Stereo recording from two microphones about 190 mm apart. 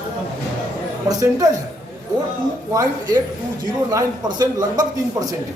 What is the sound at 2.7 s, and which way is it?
Speech, 20° right (ahead or behind).